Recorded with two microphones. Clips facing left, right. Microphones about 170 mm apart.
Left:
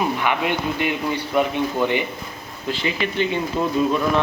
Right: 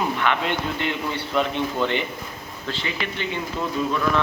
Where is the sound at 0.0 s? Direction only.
10° left (ahead or behind).